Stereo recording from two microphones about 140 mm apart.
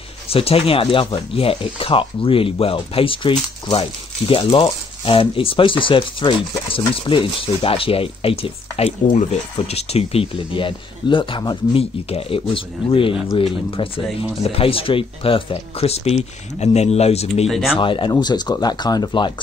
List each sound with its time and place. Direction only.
0.3 s speech: 45° left (ahead or behind)
17.5 s speech: centre (ahead or behind)
17.7 s speech: 35° left (ahead or behind)